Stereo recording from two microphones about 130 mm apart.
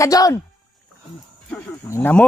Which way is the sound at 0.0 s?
25° left (ahead or behind).